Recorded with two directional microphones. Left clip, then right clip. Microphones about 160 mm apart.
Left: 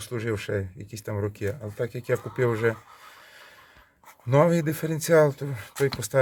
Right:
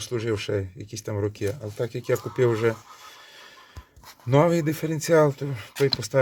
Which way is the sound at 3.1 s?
10° right (ahead or behind).